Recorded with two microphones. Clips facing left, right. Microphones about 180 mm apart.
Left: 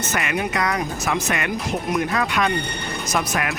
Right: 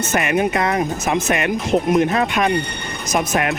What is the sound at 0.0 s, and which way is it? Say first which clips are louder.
Speech: right 6 dB; 25° right (ahead or behind).